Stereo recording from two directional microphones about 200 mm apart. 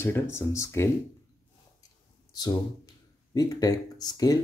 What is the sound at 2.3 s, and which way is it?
Speech, 20° left (ahead or behind).